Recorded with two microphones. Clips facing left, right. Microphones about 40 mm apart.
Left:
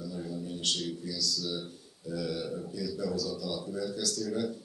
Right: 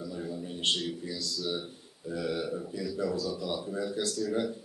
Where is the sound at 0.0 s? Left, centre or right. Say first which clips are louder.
Right 1 dB; right.